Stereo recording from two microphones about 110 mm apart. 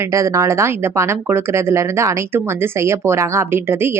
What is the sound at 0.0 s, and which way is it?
Speech, 30° right (ahead or behind).